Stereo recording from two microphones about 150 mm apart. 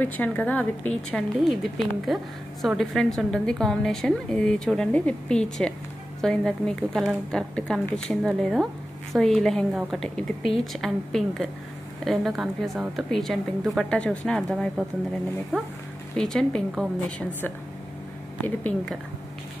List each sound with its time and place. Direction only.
0.0 s a woman's voice: 10° left (ahead or behind)
16.2 s a woman's voice: 5° left (ahead or behind)
18.4 s a woman's voice: 10° left (ahead or behind)